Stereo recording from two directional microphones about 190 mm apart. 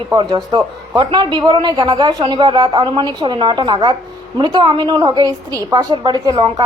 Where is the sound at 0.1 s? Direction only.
20° right (ahead or behind).